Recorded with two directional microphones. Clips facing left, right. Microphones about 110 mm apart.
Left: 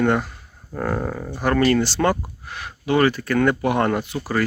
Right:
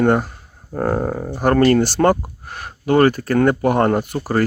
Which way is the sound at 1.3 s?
40° right (ahead or behind).